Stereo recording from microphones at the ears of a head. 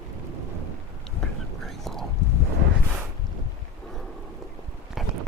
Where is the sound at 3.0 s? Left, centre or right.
Right.